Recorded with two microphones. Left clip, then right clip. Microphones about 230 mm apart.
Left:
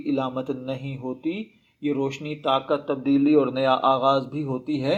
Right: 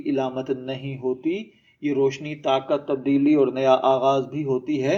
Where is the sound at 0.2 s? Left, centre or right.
Left.